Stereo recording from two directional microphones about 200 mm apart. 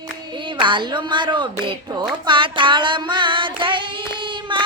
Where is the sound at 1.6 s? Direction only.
25° right (ahead or behind).